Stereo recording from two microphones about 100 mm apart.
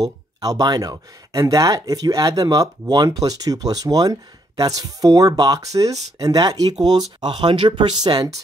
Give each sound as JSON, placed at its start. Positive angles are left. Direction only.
{"t": 0.0, "sound": "speech", "side_deg": -40}